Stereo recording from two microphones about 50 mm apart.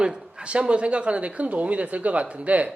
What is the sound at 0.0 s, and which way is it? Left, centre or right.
Speech, centre.